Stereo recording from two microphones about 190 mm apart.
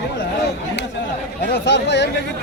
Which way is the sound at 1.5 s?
65° left (ahead or behind).